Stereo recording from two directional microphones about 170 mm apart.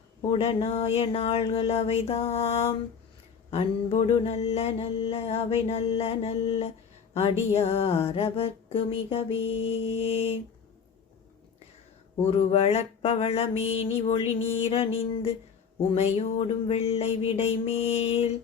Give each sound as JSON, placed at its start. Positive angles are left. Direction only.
{"t": 0.2, "sound": "mantra", "side_deg": 35}
{"t": 7.1, "sound": "speech", "side_deg": 35}
{"t": 7.5, "sound": "mantra", "side_deg": 35}
{"t": 12.2, "sound": "mantra", "side_deg": 40}